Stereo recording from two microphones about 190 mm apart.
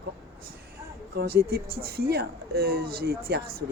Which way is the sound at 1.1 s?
55° right (ahead or behind).